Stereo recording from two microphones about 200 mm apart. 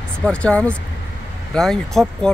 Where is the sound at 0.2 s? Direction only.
5° left (ahead or behind).